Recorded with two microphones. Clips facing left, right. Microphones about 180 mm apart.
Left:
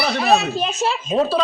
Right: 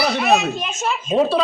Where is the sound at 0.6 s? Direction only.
35° left (ahead or behind).